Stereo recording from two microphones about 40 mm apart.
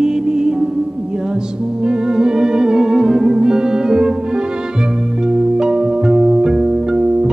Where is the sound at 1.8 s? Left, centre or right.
Centre.